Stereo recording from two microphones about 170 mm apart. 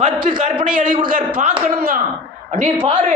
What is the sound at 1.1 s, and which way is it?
Speech, 55° right (ahead or behind).